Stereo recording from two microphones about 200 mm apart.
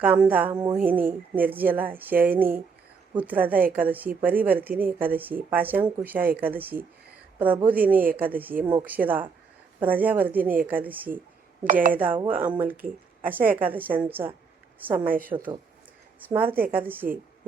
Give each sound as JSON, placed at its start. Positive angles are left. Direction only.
{"t": 0.0, "sound": "speech", "side_deg": -10}
{"t": 0.5, "sound": "a sound", "side_deg": -20}
{"t": 0.8, "sound": "speech", "side_deg": -10}
{"t": 11.6, "sound": "speech", "side_deg": -40}
{"t": 11.9, "sound": "speech", "side_deg": -10}
{"t": 15.3, "sound": "a sound", "side_deg": -20}
{"t": 16.3, "sound": "speech", "side_deg": -10}